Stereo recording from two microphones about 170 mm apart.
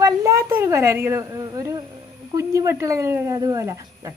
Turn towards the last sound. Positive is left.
turn(degrees=-20)  # may be behind; listen again after turning